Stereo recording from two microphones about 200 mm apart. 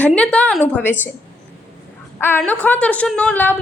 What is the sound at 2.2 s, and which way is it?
A woman's voice, 10° left (ahead or behind).